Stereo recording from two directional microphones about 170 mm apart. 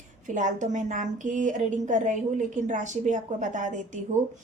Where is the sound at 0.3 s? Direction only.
45° right (ahead or behind).